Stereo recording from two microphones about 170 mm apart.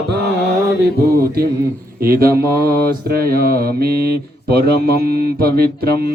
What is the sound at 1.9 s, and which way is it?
Mantra, 60° right (ahead or behind).